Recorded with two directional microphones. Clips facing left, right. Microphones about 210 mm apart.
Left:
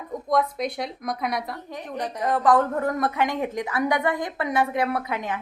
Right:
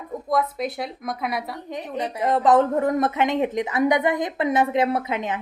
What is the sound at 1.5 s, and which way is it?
A woman's voice, 20° right (ahead or behind).